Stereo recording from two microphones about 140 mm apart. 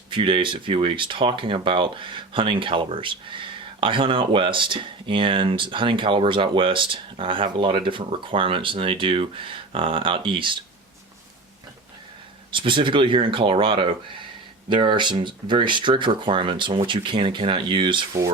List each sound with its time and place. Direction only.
0.1 s speech: 40° right (ahead or behind)
12.5 s speech: 35° right (ahead or behind)